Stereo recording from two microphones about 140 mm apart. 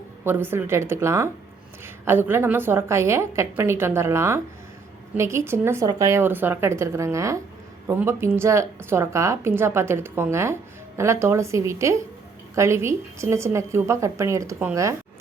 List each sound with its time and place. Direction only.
0.3 s a woman's voice: 15° right (ahead or behind)